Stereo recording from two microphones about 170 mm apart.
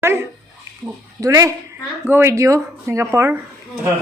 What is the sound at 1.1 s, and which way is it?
A man's voice, 20° right (ahead or behind).